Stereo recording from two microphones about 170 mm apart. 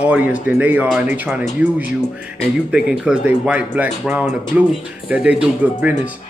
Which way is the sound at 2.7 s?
5° right (ahead or behind).